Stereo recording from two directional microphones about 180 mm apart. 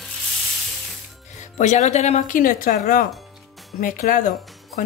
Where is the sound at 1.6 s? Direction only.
40° left (ahead or behind).